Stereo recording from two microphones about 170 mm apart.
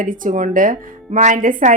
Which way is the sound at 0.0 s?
55° right (ahead or behind).